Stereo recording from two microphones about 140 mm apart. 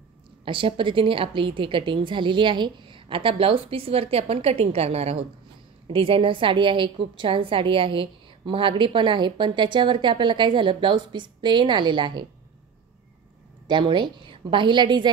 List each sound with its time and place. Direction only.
0.5 s a woman's voice: 40° right (ahead or behind)
13.7 s a woman's voice: 35° right (ahead or behind)